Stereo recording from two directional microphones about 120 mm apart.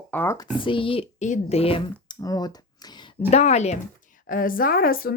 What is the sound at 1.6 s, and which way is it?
Speech, 50° left (ahead or behind).